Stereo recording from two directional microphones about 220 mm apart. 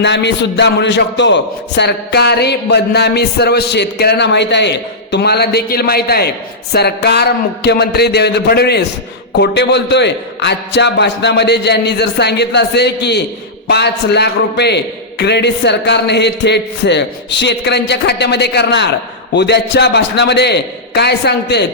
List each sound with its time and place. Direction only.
0.0 s a man's voice: 55° left (ahead or behind)